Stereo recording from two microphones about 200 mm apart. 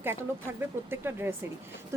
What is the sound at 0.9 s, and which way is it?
Speech, 10° right (ahead or behind).